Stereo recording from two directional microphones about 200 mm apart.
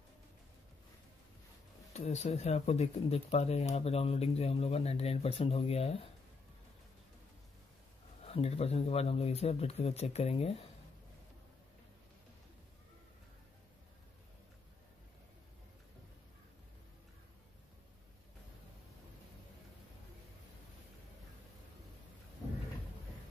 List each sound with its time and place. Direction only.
2.0 s speech: 35° left (ahead or behind)
8.3 s speech: 30° left (ahead or behind)